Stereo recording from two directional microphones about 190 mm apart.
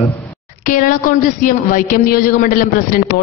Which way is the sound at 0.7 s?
45° left (ahead or behind).